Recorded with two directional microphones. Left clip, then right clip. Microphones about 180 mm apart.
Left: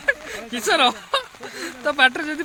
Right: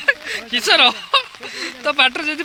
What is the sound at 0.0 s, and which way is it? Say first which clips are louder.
Speech: right 4 dB; 10° left (ahead or behind).